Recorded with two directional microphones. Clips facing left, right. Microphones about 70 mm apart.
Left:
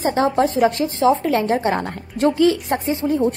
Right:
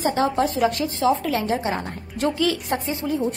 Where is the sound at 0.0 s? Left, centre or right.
Left.